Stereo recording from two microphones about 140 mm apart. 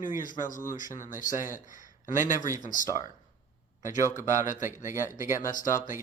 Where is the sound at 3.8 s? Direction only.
65° left (ahead or behind).